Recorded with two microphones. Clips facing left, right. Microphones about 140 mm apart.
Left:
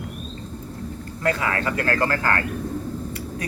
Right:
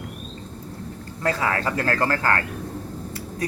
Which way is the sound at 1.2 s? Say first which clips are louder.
Even; 30° right (ahead or behind).